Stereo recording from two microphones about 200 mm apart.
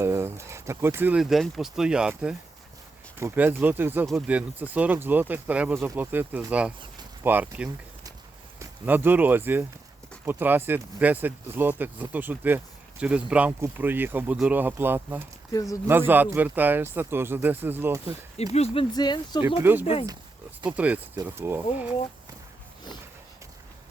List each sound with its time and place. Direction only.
0.0 s speech: 15° right (ahead or behind)
15.5 s speech: 15° left (ahead or behind)
15.9 s speech: 10° right (ahead or behind)
18.5 s speech: 30° left (ahead or behind)
20.7 s speech: 5° right (ahead or behind)